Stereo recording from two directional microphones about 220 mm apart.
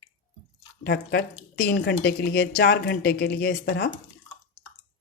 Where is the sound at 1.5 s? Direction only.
50° left (ahead or behind).